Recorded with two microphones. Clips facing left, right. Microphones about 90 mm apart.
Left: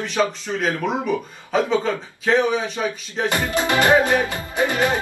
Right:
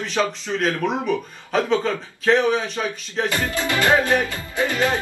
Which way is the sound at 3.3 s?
20° left (ahead or behind).